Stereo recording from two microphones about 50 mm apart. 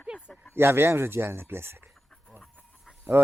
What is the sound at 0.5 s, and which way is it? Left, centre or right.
Speech, right.